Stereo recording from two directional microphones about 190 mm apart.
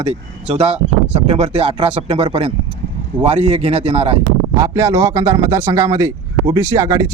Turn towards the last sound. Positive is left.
turn(degrees=-15)  # may be behind; listen again after turning